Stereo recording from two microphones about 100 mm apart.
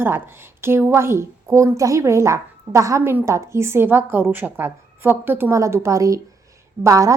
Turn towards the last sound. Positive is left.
turn(degrees=-35)  # may be behind; listen again after turning